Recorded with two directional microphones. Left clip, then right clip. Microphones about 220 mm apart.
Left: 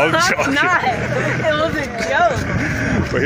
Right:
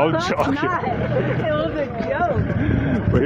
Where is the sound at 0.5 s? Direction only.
50° left (ahead or behind).